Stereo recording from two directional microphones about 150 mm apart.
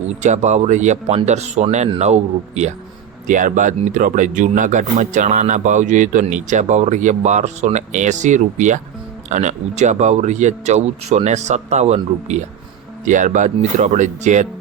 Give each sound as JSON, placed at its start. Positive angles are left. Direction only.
{"t": 0.2, "sound": "speech", "side_deg": -50}
{"t": 3.2, "sound": "speech", "side_deg": -60}